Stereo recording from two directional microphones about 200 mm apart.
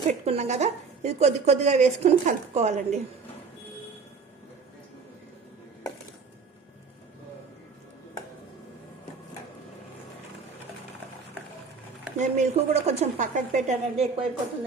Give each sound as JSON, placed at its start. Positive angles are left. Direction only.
{"t": 0.1, "sound": "speech", "side_deg": -35}
{"t": 12.1, "sound": "speech", "side_deg": -35}